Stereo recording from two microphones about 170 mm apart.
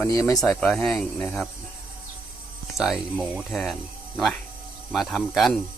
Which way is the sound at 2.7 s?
Centre (ahead or behind).